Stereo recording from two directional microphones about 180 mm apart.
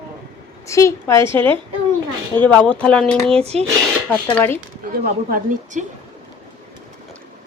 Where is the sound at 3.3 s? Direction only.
35° right (ahead or behind).